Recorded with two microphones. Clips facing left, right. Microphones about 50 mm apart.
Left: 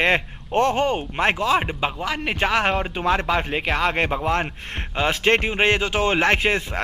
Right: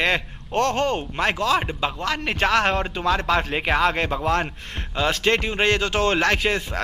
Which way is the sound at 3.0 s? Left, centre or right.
Left.